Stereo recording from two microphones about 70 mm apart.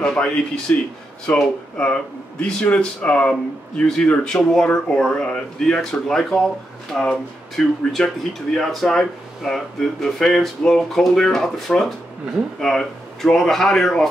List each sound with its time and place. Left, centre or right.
0.0 s speech: centre